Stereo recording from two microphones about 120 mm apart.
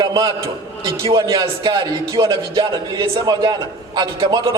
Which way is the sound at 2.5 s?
40° right (ahead or behind).